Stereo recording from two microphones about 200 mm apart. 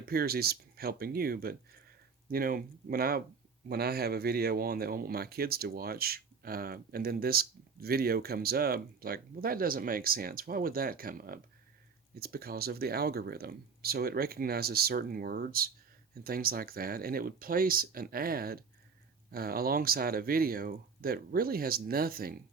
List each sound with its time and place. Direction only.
0.0 s speech: 50° right (ahead or behind)